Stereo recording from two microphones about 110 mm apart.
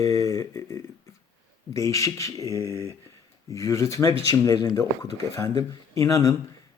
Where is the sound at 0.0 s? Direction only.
30° left (ahead or behind).